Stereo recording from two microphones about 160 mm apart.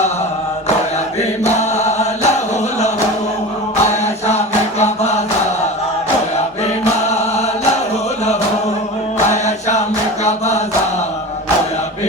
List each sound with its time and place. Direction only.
1.5 s chant: 45° left (ahead or behind)
3.8 s chant: 45° left (ahead or behind)
9.3 s music: 45° left (ahead or behind)
10.2 s chant: 45° left (ahead or behind)